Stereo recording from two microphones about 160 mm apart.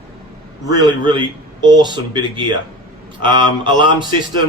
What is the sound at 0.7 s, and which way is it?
A man's voice, 30° right (ahead or behind).